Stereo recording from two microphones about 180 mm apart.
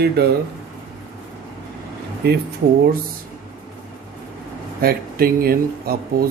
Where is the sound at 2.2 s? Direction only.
65° right (ahead or behind).